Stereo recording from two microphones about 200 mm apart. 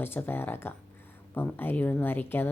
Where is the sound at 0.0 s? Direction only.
10° left (ahead or behind).